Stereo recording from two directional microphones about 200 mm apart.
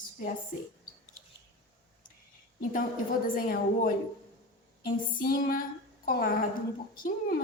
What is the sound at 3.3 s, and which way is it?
Speech, 45° left (ahead or behind).